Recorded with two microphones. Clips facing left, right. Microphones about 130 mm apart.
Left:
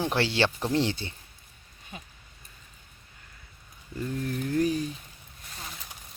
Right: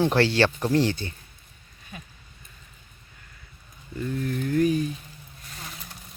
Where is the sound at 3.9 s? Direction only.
30° left (ahead or behind).